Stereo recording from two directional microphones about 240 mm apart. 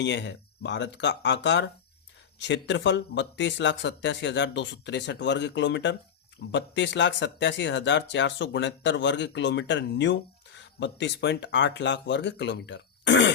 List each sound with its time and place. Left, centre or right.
0.0 s speech: left